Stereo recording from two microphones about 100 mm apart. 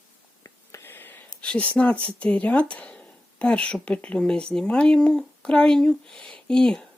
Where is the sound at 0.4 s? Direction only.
25° left (ahead or behind).